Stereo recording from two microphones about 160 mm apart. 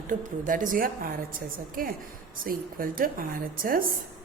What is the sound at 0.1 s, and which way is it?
A woman's voice, 55° right (ahead or behind).